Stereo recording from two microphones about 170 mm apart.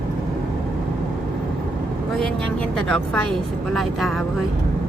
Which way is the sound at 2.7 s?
5° left (ahead or behind).